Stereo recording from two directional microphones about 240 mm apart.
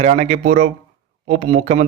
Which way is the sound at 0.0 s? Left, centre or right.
Right.